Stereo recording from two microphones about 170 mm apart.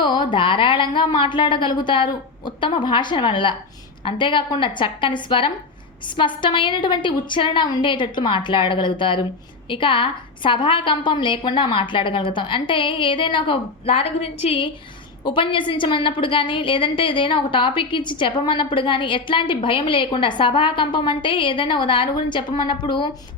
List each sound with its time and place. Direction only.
0.0 s a woman's voice: 25° left (ahead or behind)